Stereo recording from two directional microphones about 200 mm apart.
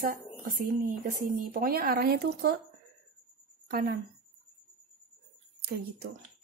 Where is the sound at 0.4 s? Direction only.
45° right (ahead or behind).